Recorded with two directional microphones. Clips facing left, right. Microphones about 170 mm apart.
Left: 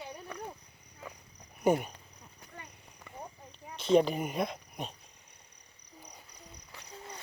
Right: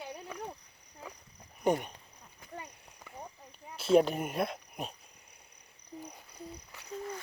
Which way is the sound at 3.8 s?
5° right (ahead or behind).